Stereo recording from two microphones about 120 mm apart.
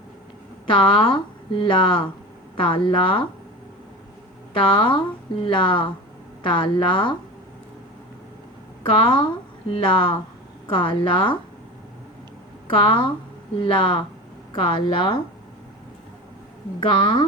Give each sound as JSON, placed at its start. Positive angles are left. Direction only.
{"t": 0.7, "sound": "speech", "side_deg": 40}
{"t": 4.5, "sound": "speech", "side_deg": 45}
{"t": 8.9, "sound": "speech", "side_deg": 40}
{"t": 12.6, "sound": "speech", "side_deg": 40}
{"t": 16.8, "sound": "speech", "side_deg": 45}